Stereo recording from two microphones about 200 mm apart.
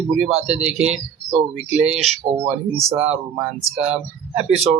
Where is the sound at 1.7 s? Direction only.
5° right (ahead or behind).